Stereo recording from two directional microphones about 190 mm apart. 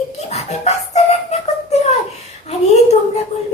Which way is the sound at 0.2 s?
35° left (ahead or behind).